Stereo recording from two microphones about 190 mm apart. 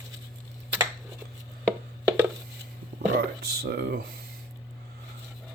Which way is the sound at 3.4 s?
55° right (ahead or behind).